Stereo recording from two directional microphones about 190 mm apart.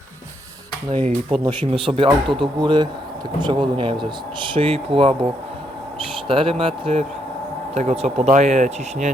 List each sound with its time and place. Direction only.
1.5 s speech: 30° right (ahead or behind)